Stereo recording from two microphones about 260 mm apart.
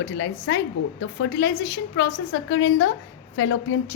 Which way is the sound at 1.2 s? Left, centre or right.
Left.